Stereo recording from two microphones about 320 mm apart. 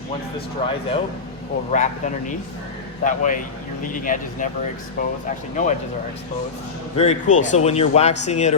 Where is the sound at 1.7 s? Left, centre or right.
Left.